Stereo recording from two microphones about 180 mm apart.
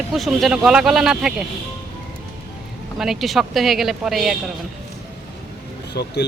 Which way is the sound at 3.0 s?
Centre (ahead or behind).